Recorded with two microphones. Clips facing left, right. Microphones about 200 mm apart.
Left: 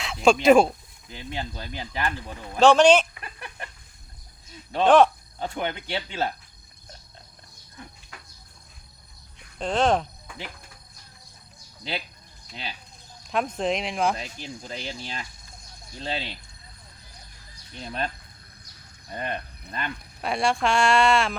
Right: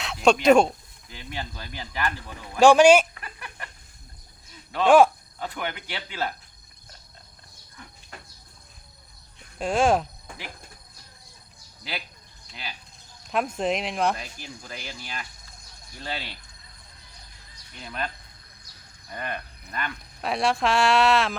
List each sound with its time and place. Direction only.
0.0 s speech: centre (ahead or behind)
1.1 s speech: 20° left (ahead or behind)
2.6 s speech: 10° right (ahead or behind)
3.2 s chicken: 25° left (ahead or behind)
4.9 s speech: 10° right (ahead or behind)
5.4 s speech: 25° left (ahead or behind)
9.6 s speech: 10° right (ahead or behind)
11.8 s speech: 25° left (ahead or behind)
13.3 s speech: 5° right (ahead or behind)
14.2 s speech: 25° left (ahead or behind)
17.7 s speech: 30° left (ahead or behind)
19.1 s speech: 25° left (ahead or behind)
20.2 s speech: centre (ahead or behind)